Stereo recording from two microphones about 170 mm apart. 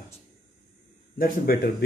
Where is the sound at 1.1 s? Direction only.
60° left (ahead or behind).